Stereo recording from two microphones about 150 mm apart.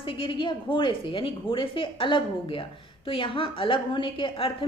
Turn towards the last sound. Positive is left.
turn(degrees=35)  # may be behind; listen again after turning